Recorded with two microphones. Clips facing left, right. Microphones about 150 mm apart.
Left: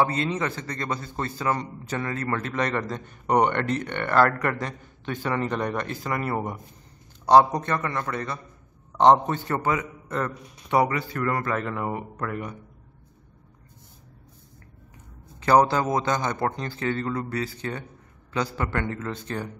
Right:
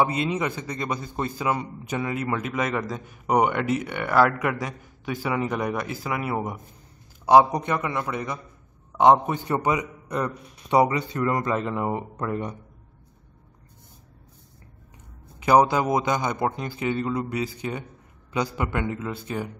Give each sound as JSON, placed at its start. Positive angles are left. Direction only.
{"t": 0.0, "sound": "a man's voice", "side_deg": -15}
{"t": 15.4, "sound": "a man's voice", "side_deg": -15}